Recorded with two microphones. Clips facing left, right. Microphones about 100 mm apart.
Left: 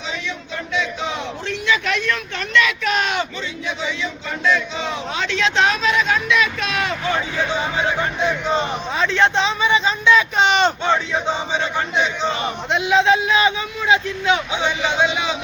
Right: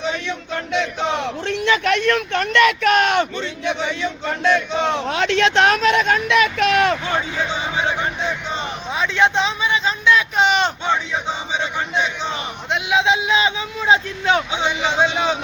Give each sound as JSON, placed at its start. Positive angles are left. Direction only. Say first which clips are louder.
{"t": 0.3, "sound": "speech", "louder": "right 3 dB", "side_deg": -65}
{"t": 8.9, "sound": "speech", "louder": "right 1 dB", "side_deg": -10}